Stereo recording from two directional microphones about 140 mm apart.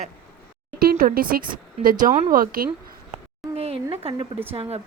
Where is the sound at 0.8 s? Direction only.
90° right.